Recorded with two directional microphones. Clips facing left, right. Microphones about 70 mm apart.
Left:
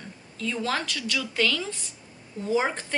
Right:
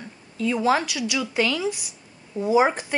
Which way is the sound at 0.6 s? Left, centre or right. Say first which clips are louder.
Right 8 dB; centre.